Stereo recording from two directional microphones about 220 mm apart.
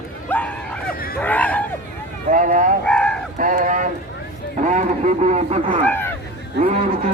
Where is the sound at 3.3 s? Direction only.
35° right (ahead or behind).